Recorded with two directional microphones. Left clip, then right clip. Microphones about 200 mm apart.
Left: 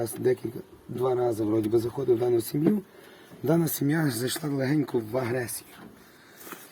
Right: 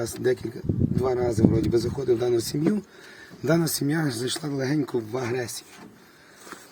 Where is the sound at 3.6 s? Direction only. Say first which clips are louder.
Right 1 dB; centre (ahead or behind).